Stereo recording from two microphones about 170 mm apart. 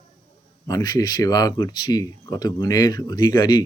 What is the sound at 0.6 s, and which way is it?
Speech, 20° left (ahead or behind).